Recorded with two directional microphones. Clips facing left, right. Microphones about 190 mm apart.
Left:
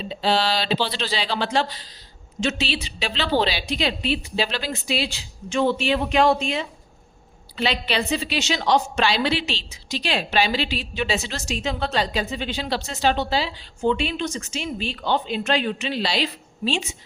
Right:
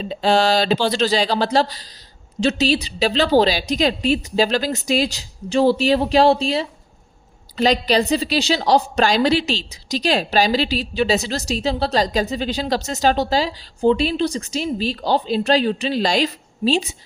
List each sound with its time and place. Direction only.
0.0 s a woman's voice: 45° right (ahead or behind)